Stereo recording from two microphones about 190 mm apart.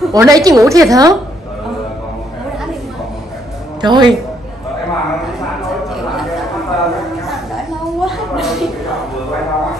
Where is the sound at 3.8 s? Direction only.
25° right (ahead or behind).